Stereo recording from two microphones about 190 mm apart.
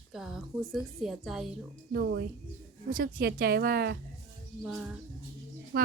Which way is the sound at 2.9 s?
45° right (ahead or behind).